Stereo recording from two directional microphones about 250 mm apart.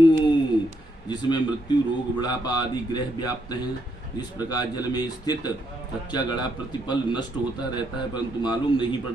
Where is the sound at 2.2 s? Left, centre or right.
Centre.